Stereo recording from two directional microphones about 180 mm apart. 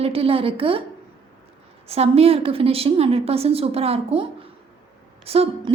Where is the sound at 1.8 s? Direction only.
35° right (ahead or behind).